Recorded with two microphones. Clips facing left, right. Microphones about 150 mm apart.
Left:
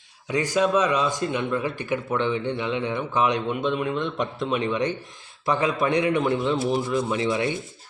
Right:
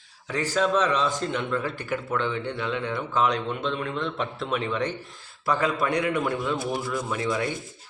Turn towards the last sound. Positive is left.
turn(degrees=25)  # may be behind; listen again after turning